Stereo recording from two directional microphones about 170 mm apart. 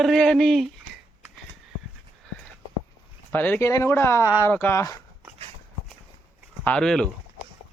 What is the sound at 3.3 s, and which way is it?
Speech, 10° left (ahead or behind).